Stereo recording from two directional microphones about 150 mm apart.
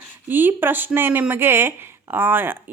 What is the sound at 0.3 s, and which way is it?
Speech, 15° right (ahead or behind).